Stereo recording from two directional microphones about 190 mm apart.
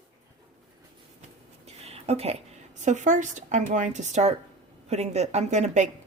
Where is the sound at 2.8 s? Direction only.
40° right (ahead or behind).